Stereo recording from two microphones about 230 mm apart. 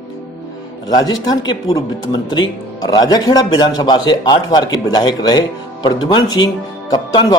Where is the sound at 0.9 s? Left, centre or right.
Centre.